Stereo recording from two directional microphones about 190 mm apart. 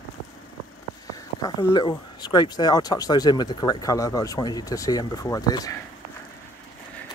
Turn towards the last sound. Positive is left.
turn(degrees=20)  # may be behind; listen again after turning